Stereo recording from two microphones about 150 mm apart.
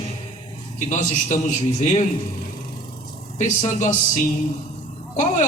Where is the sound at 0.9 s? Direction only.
50° left (ahead or behind).